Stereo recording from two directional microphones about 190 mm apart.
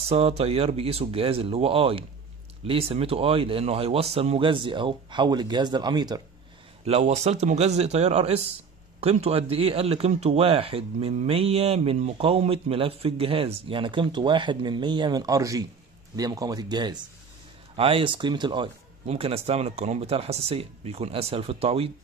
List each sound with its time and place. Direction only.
0.1 s speech: 30° right (ahead or behind)
6.8 s speech: 35° right (ahead or behind)